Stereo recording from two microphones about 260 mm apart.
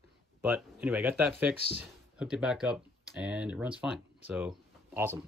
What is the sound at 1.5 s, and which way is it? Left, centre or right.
Speech, left.